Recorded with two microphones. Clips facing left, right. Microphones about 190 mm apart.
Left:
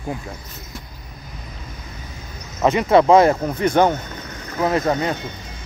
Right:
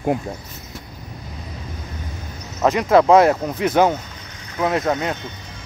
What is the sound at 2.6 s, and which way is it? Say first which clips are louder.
Speech: even; centre (ahead or behind).